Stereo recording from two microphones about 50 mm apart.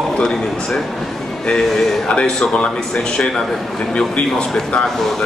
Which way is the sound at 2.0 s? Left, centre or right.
Left.